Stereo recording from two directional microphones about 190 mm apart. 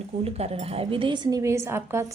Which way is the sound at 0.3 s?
30° right (ahead or behind).